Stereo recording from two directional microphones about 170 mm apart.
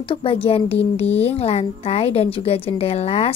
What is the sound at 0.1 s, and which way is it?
A woman's voice, 35° left (ahead or behind).